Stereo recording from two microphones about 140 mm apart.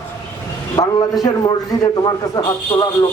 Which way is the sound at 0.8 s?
30° left (ahead or behind).